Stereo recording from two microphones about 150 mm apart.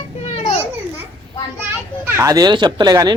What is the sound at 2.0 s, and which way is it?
Speech, 20° right (ahead or behind).